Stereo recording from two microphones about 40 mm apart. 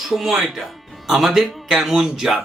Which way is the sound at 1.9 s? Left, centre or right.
Centre.